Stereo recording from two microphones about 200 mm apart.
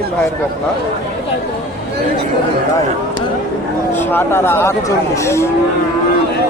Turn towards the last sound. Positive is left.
turn(degrees=15)  # may be behind; listen again after turning